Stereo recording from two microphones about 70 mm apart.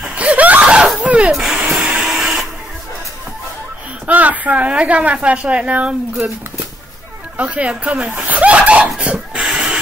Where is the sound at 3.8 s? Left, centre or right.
Right.